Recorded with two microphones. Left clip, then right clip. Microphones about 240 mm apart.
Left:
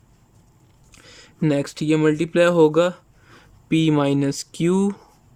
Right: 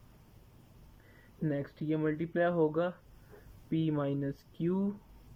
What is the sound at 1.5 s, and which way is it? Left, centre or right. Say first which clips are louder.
Speech: left 14 dB; left.